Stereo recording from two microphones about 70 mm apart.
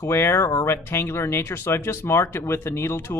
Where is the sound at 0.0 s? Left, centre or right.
Left.